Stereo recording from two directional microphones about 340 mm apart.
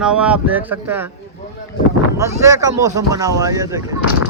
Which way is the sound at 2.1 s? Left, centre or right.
Centre.